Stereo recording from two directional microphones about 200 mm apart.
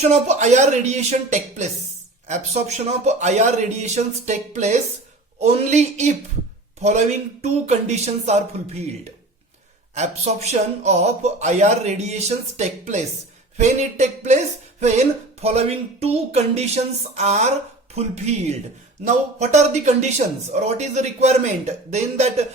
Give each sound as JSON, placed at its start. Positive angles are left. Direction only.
{"t": 0.0, "sound": "speech", "side_deg": -35}
{"t": 9.9, "sound": "speech", "side_deg": -35}